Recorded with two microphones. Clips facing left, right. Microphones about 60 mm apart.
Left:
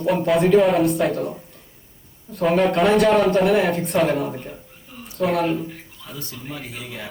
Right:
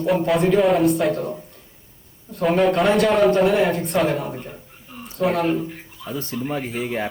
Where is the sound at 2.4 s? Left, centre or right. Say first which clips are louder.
Even; centre.